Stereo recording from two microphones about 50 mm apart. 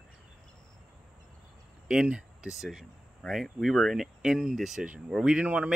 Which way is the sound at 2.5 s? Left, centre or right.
Centre.